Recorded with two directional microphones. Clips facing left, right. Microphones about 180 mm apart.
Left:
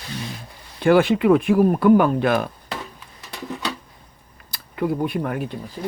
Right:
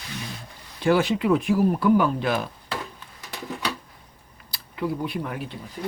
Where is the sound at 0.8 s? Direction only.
55° left (ahead or behind).